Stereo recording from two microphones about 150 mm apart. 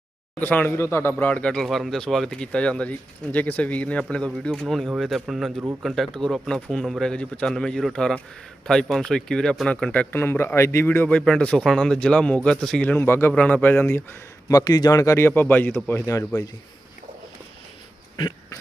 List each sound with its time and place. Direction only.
0.3 s a man's voice: 10° left (ahead or behind)